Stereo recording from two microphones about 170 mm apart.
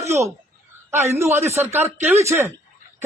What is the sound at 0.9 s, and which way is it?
A woman's voice, 15° right (ahead or behind).